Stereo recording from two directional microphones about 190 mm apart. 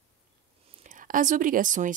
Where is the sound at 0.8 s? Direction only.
40° right (ahead or behind).